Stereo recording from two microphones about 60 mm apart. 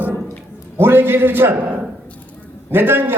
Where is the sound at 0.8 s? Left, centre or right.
Right.